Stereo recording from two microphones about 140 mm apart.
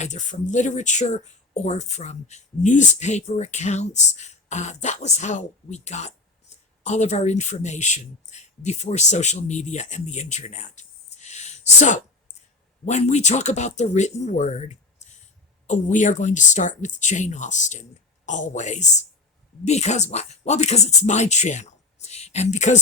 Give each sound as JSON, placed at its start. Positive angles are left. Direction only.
{"t": 0.0, "sound": "speech", "side_deg": 60}